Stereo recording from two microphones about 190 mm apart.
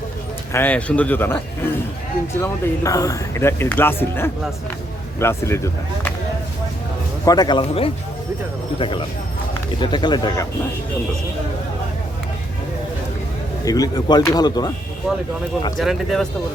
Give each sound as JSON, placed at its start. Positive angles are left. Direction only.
{"t": 0.5, "sound": "speech", "side_deg": 10}
{"t": 7.3, "sound": "speech", "side_deg": 20}
{"t": 13.7, "sound": "speech", "side_deg": 20}
{"t": 15.8, "sound": "speech", "side_deg": 0}